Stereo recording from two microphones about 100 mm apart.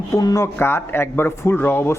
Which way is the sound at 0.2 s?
35° left (ahead or behind).